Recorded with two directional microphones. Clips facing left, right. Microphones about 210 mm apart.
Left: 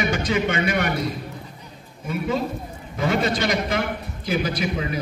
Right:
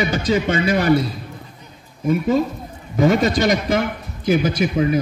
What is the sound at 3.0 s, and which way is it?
A man's voice, 45° right (ahead or behind).